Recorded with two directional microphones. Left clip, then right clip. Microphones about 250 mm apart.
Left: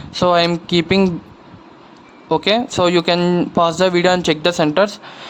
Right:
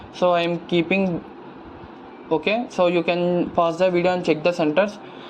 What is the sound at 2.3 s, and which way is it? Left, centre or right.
Speech, left.